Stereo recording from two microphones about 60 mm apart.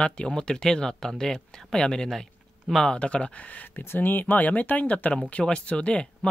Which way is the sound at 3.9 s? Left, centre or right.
Left.